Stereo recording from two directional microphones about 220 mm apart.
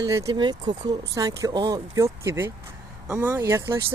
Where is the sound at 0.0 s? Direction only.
15° right (ahead or behind).